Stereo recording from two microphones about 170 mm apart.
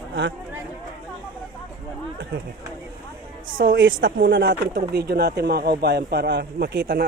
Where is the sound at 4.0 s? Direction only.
60° right (ahead or behind); by 4.8 s 90° right.